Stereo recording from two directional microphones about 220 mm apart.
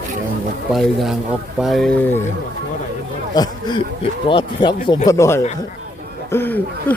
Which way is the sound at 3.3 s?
20° left (ahead or behind).